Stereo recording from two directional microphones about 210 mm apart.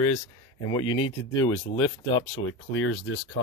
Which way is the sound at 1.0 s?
75° left (ahead or behind).